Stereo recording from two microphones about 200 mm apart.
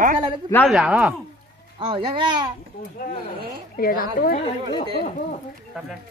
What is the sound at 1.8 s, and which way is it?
Speech, 25° right (ahead or behind).